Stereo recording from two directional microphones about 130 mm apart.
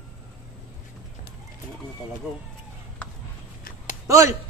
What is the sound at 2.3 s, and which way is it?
Speech, 10° right (ahead or behind).